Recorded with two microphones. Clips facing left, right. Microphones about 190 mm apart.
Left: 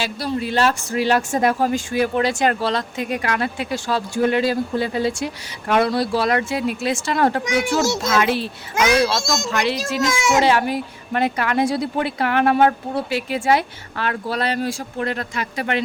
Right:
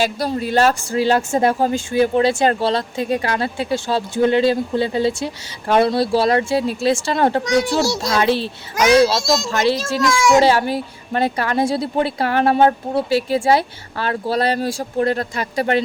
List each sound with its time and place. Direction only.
0.0 s speech: 45° right (ahead or behind); by 7.4 s 25° right (ahead or behind)
7.4 s a child's voice: 15° left (ahead or behind)
8.1 s a woman's voice: 30° right (ahead or behind)
10.0 s a child's voice: 20° left (ahead or behind)
10.4 s a woman's voice: 30° right (ahead or behind)